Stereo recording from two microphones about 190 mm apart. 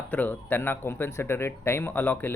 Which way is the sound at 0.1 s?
10° left (ahead or behind).